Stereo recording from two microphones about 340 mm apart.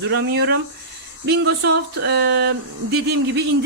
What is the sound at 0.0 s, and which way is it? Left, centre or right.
Speech, right.